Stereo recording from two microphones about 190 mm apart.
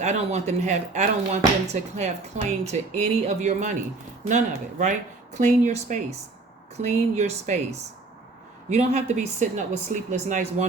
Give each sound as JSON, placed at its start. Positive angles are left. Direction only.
{"t": 0.0, "sound": "speech", "side_deg": -35}